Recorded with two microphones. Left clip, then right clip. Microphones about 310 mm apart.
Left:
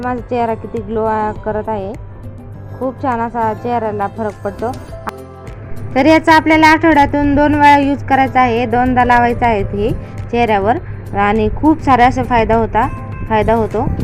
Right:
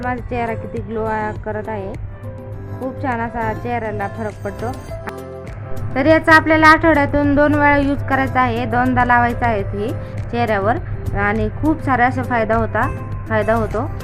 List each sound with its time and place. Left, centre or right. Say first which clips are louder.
0.0 s speech: left 5 dB; centre
3.0 s a woman's voice: left 5 dB; centre